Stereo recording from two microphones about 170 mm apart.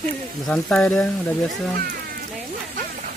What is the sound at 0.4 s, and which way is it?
Speech, 5° left (ahead or behind).